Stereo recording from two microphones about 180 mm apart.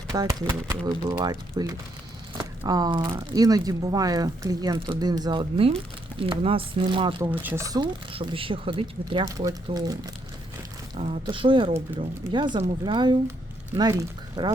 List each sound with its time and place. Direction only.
0.1 s speech: 20° right (ahead or behind)
7.2 s speech: 10° right (ahead or behind)
10.9 s speech: 35° right (ahead or behind)